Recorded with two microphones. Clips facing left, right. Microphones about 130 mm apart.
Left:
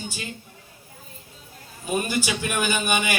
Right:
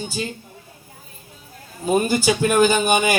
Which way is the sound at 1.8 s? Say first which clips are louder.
Right 7 dB; 35° right (ahead or behind).